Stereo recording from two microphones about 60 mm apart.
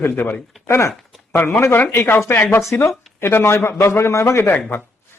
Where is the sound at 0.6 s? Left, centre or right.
Left.